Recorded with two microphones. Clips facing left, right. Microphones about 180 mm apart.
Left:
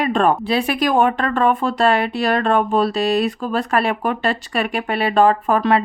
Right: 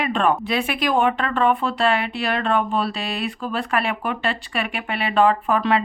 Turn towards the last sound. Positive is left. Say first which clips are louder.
# left 3 dB
turn(degrees=45)  # may be behind; listen again after turning